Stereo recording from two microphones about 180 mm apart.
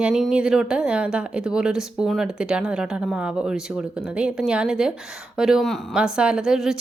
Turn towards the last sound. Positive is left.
turn(degrees=-5)  # may be behind; listen again after turning